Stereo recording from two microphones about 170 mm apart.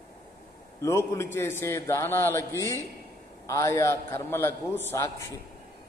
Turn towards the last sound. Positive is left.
turn(degrees=15)  # may be behind; listen again after turning